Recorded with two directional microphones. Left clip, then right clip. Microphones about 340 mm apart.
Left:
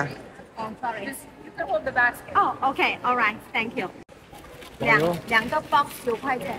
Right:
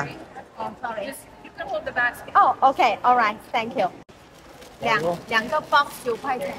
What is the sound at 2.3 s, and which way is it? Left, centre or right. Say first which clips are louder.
A woman's voice: right 10 dB; centre.